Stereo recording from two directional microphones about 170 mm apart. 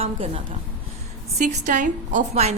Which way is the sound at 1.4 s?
45° right (ahead or behind).